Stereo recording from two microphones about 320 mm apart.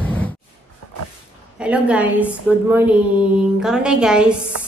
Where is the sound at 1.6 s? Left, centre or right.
Centre.